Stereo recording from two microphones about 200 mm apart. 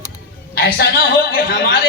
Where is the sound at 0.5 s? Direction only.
50° left (ahead or behind).